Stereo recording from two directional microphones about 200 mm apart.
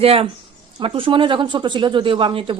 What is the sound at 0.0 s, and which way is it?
Speech, 30° right (ahead or behind).